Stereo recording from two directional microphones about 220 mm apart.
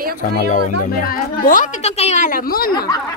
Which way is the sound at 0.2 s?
40° left (ahead or behind).